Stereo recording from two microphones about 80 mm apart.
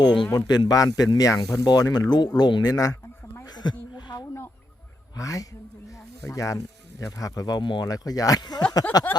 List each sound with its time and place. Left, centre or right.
0.0 s speech: left
3.5 s a sound: left
5.1 s speech: left
7.9 s speech: left